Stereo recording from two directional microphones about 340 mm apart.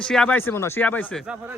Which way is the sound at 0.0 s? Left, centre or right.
Centre.